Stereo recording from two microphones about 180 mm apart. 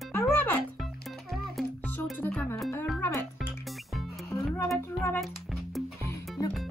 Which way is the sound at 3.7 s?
Centre (ahead or behind).